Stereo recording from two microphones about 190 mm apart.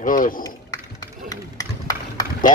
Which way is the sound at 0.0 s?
45° left (ahead or behind).